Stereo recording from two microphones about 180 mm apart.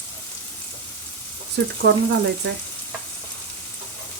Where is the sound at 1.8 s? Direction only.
65° right (ahead or behind).